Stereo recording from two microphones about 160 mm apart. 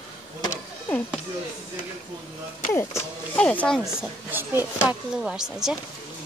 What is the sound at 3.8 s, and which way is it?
A woman's voice, 10° right (ahead or behind).